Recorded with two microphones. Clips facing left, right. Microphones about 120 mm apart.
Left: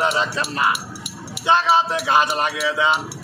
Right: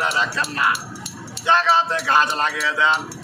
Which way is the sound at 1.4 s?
15° left (ahead or behind).